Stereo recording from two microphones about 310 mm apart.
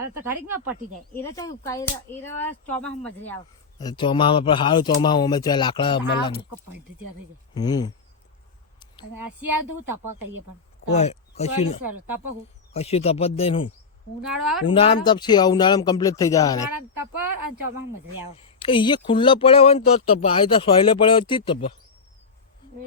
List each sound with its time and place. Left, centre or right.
0.1 s speech: centre
1.1 s speech: centre
6.5 s speech: right
7.5 s speech: centre
9.1 s speech: right
10.9 s speech: left
11.9 s speech: right
12.7 s speech: centre
14.7 s speech: centre
16.7 s speech: right
18.6 s speech: centre